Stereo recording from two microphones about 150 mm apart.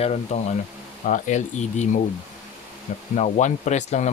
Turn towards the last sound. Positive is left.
turn(degrees=50)  # may be behind; listen again after turning